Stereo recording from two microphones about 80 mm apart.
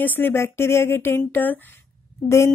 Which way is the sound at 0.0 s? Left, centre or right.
Left.